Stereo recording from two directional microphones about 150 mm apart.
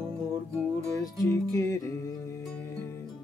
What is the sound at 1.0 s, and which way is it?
Music, 20° left (ahead or behind).